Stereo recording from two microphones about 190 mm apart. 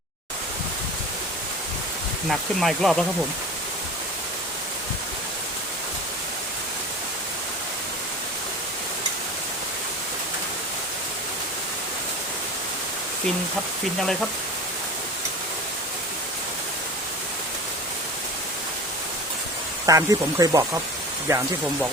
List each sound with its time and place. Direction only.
2.6 s speech: centre (ahead or behind)
19.8 s speech: 15° right (ahead or behind)